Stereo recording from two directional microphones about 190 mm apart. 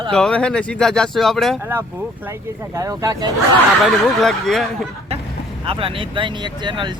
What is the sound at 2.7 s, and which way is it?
Speech, 15° right (ahead or behind).